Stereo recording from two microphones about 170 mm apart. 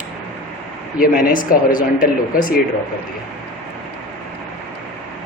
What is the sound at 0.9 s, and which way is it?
Speech, 60° left (ahead or behind).